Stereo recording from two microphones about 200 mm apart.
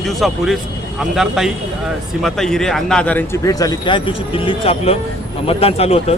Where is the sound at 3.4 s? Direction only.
20° left (ahead or behind).